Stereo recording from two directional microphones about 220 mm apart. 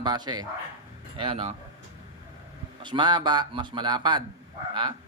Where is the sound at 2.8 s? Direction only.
20° right (ahead or behind).